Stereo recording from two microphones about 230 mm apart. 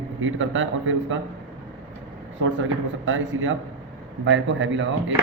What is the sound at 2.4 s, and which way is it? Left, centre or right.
A man's voice, right.